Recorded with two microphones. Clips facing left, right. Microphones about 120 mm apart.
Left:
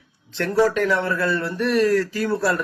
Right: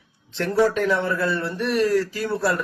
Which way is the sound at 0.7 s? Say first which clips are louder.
Left 1 dB; 20° right (ahead or behind).